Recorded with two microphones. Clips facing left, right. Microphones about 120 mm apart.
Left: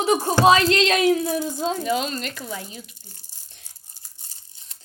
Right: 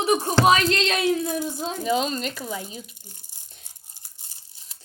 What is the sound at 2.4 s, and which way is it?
Tearing, 15° right (ahead or behind).